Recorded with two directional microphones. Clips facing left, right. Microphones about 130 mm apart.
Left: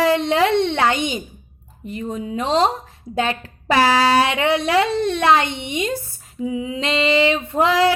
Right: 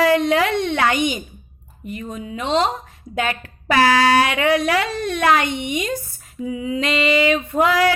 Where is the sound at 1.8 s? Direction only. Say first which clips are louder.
Left 3 dB; 30° left (ahead or behind).